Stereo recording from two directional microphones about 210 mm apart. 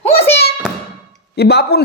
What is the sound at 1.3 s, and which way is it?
Speech, 50° left (ahead or behind).